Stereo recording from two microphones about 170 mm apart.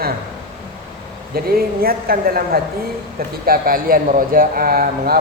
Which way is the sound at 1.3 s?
60° right (ahead or behind).